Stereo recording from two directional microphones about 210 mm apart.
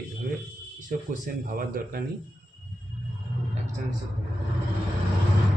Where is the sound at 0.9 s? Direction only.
40° right (ahead or behind).